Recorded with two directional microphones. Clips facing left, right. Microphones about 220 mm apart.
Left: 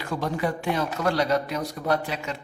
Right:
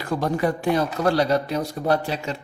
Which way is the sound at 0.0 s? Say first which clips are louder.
Right 4 dB; 40° right (ahead or behind).